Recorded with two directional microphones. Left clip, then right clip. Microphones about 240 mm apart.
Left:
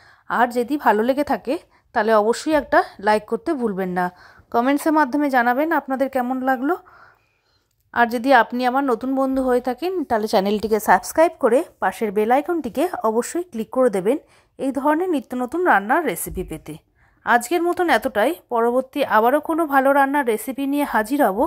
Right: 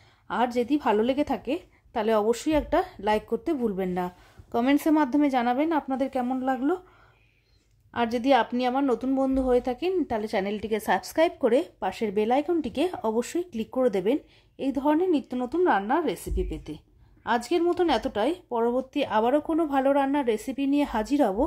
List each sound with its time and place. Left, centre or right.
0.3 s a woman's voice: centre
7.9 s a woman's voice: centre
10.8 s a woman's voice: centre